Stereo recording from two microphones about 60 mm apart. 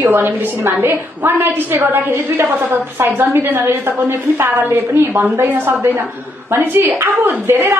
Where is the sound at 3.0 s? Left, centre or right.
Right.